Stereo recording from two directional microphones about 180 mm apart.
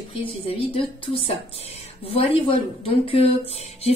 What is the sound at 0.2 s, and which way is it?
A woman's voice, 30° left (ahead or behind).